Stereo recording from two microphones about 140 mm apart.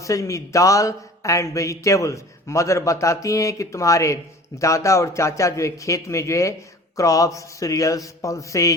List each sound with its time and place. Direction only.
0.0 s a man's voice: 20° left (ahead or behind)